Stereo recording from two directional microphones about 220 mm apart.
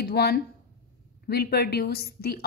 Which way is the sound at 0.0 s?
45° left (ahead or behind).